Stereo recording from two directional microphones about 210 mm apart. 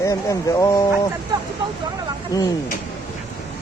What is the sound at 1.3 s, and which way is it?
Speech, 20° right (ahead or behind).